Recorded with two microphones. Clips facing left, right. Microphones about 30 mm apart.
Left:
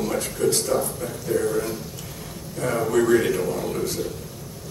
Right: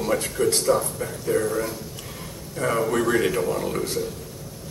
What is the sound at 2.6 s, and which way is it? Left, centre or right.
Speech, right.